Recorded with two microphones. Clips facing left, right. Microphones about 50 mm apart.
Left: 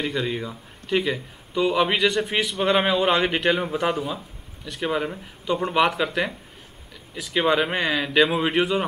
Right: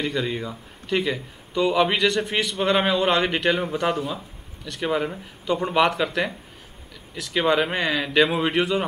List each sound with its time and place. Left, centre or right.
0.0 s speech: centre